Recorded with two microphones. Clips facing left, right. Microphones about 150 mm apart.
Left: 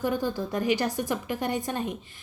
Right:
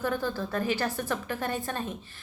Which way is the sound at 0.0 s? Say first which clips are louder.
Left 2 dB; 15° left (ahead or behind).